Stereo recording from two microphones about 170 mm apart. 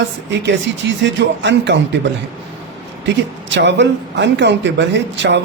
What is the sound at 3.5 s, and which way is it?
Speech, 90° right.